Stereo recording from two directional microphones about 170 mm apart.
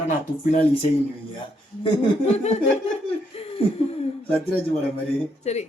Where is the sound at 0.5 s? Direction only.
35° left (ahead or behind).